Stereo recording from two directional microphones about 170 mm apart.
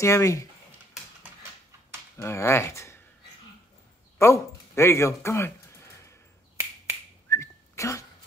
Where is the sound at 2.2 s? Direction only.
15° left (ahead or behind).